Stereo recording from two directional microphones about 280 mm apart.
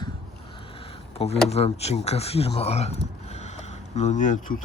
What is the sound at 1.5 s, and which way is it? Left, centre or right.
Speech, left.